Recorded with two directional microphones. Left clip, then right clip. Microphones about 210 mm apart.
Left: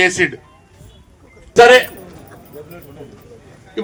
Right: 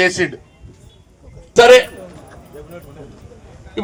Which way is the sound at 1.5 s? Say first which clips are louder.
Even; 45° right (ahead or behind).